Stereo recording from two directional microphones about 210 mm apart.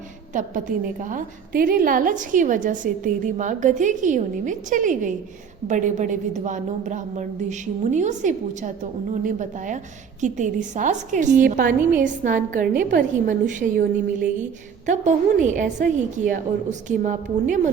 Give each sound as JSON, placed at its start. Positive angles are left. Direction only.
{"t": 0.3, "sound": "a woman's voice", "side_deg": -35}